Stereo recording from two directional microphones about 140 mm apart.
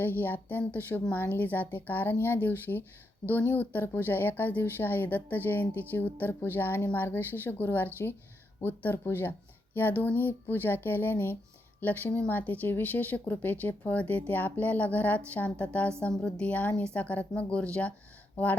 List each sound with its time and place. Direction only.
0.0 s speech: 15° left (ahead or behind)